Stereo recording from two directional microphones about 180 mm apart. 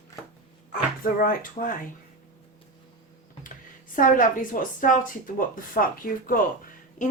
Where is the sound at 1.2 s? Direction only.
50° left (ahead or behind).